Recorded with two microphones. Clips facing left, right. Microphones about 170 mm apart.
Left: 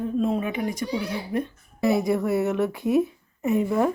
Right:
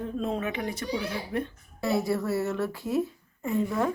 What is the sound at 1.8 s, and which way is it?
Speech, 20° left (ahead or behind).